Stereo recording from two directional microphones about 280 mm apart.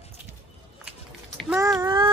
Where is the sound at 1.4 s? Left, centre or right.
Centre.